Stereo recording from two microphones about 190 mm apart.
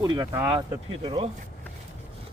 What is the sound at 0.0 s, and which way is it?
Speech, 20° right (ahead or behind).